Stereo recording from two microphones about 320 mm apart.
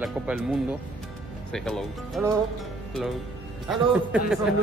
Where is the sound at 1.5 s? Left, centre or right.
Centre.